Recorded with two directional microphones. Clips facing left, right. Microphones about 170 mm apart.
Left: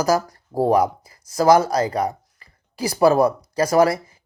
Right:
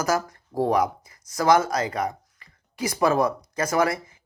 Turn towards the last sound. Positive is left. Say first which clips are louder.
# left 6 dB
turn(degrees=35)  # may be behind; listen again after turning